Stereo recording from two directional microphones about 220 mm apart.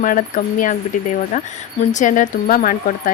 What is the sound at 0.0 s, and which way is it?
Speech, 35° left (ahead or behind).